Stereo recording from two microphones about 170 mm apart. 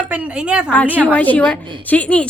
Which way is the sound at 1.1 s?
10° left (ahead or behind).